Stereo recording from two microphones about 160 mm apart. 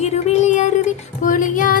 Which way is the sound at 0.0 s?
45° left (ahead or behind).